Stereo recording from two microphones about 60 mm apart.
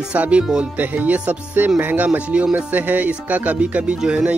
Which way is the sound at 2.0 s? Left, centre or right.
Right.